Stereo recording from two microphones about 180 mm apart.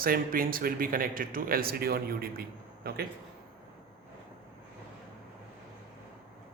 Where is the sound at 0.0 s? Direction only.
55° right (ahead or behind).